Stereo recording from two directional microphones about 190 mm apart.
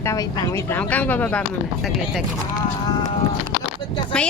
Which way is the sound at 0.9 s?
10° left (ahead or behind).